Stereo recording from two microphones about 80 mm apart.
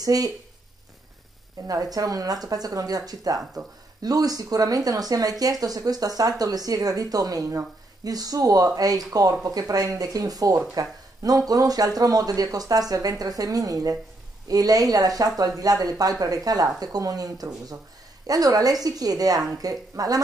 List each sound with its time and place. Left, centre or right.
0.0 s speech: right
1.7 s speech: right